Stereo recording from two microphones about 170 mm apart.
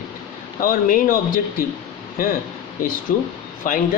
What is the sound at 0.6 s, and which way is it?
Speech, 55° left (ahead or behind).